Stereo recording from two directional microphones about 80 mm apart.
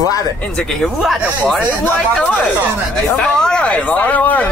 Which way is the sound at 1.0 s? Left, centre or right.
Centre.